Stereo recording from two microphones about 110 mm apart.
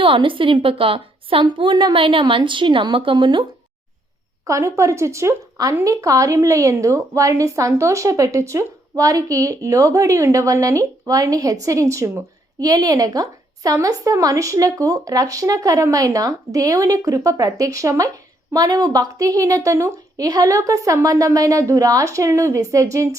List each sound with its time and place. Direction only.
0.0 s a woman's voice: 50° right (ahead or behind)
4.4 s a woman's voice: 30° right (ahead or behind)